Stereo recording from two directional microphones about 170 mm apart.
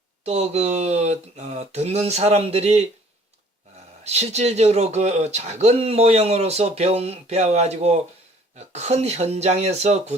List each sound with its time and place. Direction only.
0.3 s speech: 40° right (ahead or behind)
4.0 s speech: 40° right (ahead or behind)